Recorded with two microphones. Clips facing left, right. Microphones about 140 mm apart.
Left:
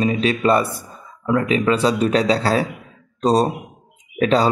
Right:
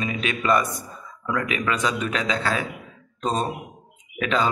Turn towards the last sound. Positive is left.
turn(degrees=35)  # may be behind; listen again after turning